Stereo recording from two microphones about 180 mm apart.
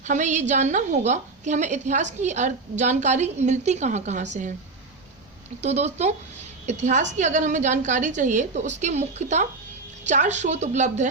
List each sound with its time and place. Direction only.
0.0 s a woman's voice: 40° right (ahead or behind)
5.6 s a woman's voice: 40° right (ahead or behind)